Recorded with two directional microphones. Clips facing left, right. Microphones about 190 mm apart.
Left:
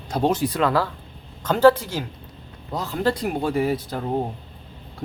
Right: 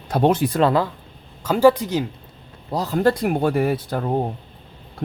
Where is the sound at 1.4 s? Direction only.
10° right (ahead or behind).